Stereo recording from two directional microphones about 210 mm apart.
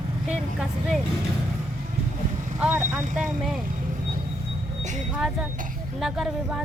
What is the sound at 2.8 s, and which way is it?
Speech, 35° right (ahead or behind).